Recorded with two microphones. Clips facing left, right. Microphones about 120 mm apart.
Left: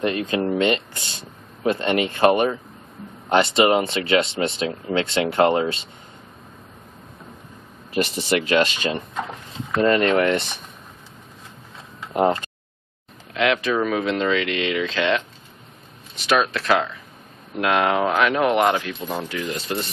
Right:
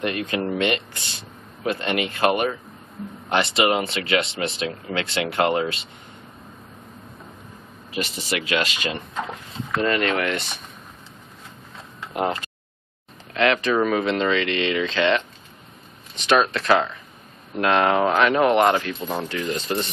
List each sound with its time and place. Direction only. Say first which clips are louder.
0.0 s speech: left 3 dB; 25° left (ahead or behind)
8.0 s speech: left 6 dB; centre (ahead or behind)
8.5 s speech: left 3 dB; 35° left (ahead or behind)
13.3 s speech: right 1 dB; 5° left (ahead or behind)
16.3 s speech: right 1 dB; 5° left (ahead or behind)